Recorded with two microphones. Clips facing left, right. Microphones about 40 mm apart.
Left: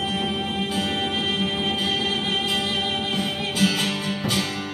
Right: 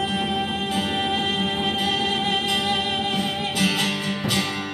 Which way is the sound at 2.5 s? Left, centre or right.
Right.